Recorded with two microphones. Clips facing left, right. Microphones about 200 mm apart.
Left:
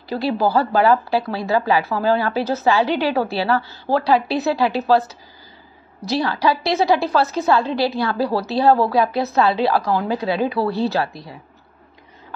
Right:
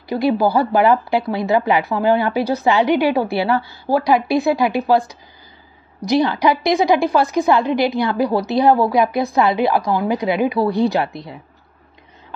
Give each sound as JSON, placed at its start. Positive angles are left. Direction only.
{"t": 0.1, "sound": "speech", "side_deg": -15}